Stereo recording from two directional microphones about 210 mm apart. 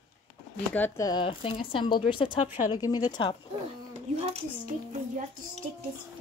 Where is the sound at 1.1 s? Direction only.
25° left (ahead or behind).